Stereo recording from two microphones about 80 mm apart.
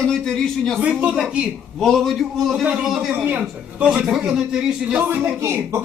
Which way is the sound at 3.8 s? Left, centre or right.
Centre.